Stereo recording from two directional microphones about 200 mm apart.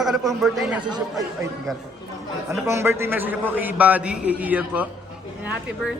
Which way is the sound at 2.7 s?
15° right (ahead or behind).